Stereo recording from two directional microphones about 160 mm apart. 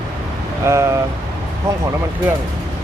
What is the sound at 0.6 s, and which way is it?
Speech, 15° right (ahead or behind).